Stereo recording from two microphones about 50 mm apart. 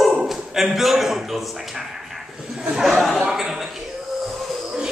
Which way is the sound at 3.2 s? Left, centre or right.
Centre.